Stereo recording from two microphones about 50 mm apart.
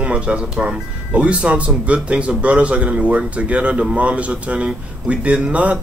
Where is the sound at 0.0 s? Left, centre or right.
Right.